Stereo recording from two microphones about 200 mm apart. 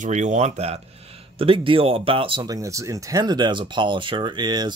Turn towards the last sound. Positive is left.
turn(degrees=-20)  # may be behind; listen again after turning